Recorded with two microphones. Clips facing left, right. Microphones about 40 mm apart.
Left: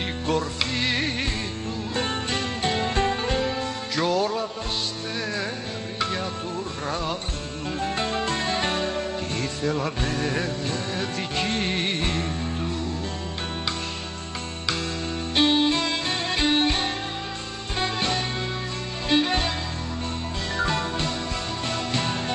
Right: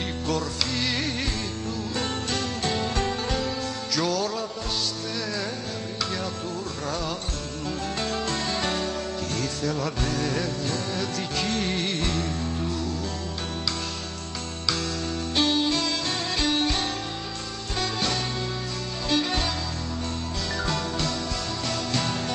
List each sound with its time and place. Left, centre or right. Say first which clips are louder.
0.3 s music: left 3 dB; left
7.8 s music: left 4 dB; left
15.3 s music: left 3 dB; left
20.5 s music: left 4 dB; left